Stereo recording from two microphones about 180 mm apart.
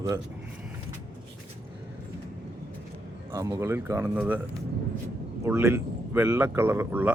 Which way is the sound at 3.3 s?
20° right (ahead or behind).